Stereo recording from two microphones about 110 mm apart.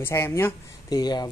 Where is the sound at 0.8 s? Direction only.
40° left (ahead or behind).